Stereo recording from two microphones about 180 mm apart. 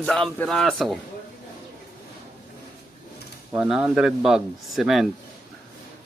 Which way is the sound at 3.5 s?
5° right (ahead or behind).